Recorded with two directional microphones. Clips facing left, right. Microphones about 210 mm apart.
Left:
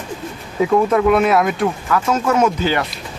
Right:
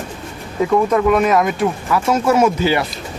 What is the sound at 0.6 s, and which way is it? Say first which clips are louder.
Speech: even; 5° left (ahead or behind).